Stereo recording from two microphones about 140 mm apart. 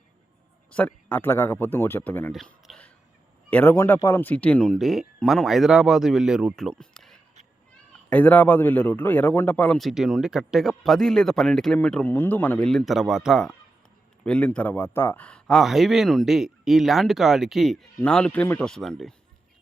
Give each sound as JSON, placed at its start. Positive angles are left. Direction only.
{"t": 0.7, "sound": "speech", "side_deg": 10}
{"t": 2.3, "sound": "a sound", "side_deg": 0}
{"t": 3.5, "sound": "a man's voice", "side_deg": 15}
{"t": 14.3, "sound": "a man's voice", "side_deg": 10}
{"t": 18.7, "sound": "a man's voice", "side_deg": 0}